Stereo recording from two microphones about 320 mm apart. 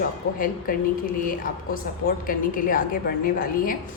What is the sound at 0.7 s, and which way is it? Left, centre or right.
A woman's voice, left.